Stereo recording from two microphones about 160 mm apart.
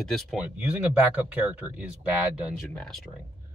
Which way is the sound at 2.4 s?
5° left (ahead or behind).